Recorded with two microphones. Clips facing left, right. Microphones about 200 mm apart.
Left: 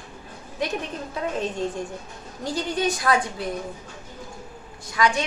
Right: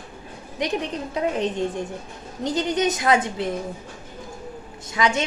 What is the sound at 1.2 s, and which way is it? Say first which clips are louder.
Speech: right 5 dB; 20° right (ahead or behind).